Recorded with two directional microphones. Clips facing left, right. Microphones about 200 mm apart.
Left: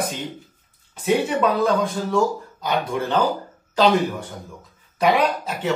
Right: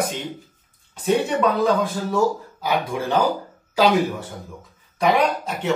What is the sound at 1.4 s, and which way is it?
A man's voice, centre (ahead or behind).